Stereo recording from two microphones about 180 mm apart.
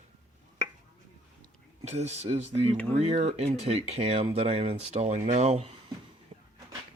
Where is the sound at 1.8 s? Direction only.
40° right (ahead or behind).